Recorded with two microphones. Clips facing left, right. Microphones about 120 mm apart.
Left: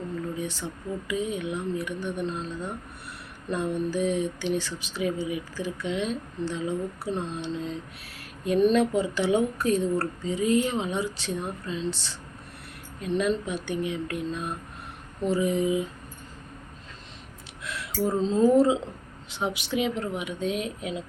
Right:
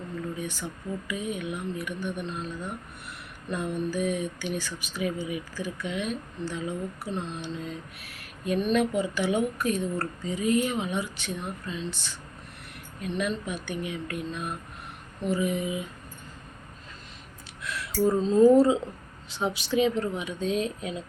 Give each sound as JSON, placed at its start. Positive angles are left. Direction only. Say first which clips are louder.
{"t": 0.3, "sound": "speech", "louder": "left 2 dB", "side_deg": 25}
{"t": 13.0, "sound": "speech", "louder": "left 4 dB", "side_deg": 25}
{"t": 17.6, "sound": "speech", "louder": "right 3 dB", "side_deg": 20}